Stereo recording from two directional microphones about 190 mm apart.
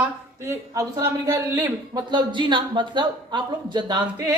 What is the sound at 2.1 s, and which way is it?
Speech, 25° right (ahead or behind).